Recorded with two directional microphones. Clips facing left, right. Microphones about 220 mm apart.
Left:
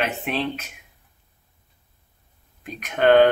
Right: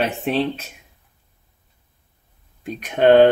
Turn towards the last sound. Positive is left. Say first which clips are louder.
# right 3 dB
turn(degrees=-30)  # may be behind; listen again after turning